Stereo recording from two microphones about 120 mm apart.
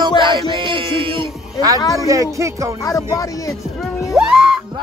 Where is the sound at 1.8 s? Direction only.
30° left (ahead or behind).